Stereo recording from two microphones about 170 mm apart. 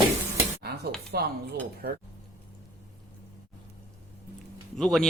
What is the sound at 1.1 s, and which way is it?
Dishes, 65° right (ahead or behind).